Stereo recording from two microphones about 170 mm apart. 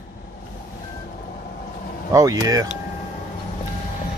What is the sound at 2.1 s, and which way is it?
Speech, 20° right (ahead or behind).